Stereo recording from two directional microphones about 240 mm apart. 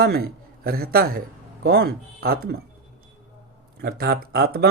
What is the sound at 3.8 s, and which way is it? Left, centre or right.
Speech, right.